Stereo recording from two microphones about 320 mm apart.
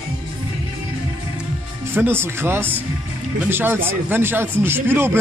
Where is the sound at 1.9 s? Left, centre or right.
Centre.